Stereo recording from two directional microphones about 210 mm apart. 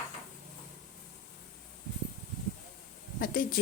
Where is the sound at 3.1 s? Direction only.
45° left (ahead or behind).